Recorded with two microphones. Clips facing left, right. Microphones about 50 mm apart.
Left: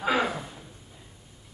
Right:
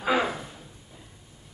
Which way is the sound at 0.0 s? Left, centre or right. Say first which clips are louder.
Right 1 dB; centre.